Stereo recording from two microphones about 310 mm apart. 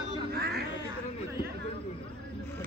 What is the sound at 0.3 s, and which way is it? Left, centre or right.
Quack, right.